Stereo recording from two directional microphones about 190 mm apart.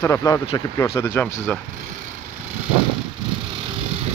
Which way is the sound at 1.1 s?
5° left (ahead or behind).